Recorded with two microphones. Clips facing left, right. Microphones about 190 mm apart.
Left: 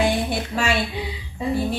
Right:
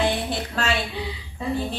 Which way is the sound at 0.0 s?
10° left (ahead or behind).